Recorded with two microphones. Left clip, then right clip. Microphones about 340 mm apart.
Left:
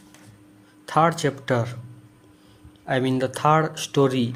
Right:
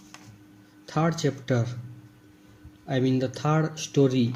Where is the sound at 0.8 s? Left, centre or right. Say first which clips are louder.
Left 7 dB; left.